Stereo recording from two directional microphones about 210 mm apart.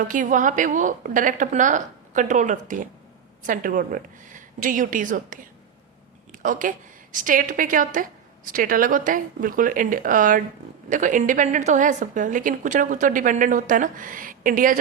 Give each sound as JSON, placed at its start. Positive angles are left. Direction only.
{"t": 0.1, "sound": "a woman's voice", "side_deg": -40}